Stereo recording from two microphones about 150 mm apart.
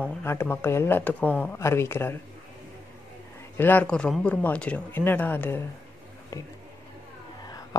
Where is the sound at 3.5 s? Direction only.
10° left (ahead or behind).